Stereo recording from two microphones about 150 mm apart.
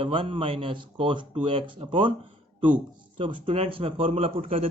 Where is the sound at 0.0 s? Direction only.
35° right (ahead or behind).